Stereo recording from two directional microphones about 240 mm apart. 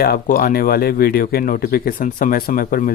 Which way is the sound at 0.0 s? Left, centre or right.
Left.